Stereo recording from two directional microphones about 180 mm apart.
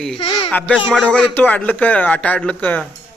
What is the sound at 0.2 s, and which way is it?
Speech, 30° left (ahead or behind).